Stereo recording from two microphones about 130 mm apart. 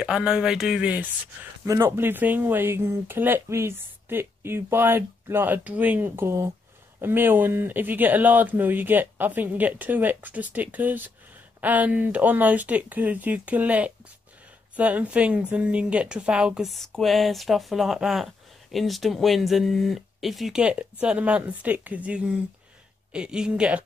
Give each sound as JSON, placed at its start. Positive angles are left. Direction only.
{"t": 0.0, "sound": "a woman's voice", "side_deg": -5}